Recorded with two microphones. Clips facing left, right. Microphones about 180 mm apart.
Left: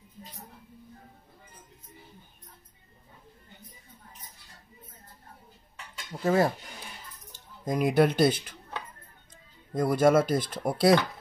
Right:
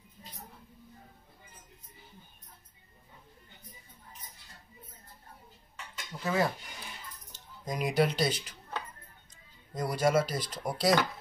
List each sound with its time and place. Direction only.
6.2 s speech: 45° left (ahead or behind)
7.6 s speech: 55° left (ahead or behind)
9.8 s speech: 50° left (ahead or behind)